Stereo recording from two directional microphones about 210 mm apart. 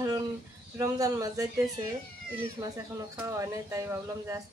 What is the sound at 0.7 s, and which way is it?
Speech, 15° right (ahead or behind).